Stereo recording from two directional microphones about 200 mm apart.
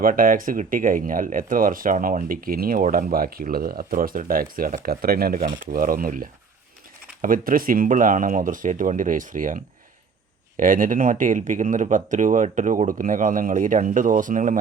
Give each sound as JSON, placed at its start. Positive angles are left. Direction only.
{"t": 0.0, "sound": "speech", "side_deg": -45}
{"t": 10.6, "sound": "speech", "side_deg": -40}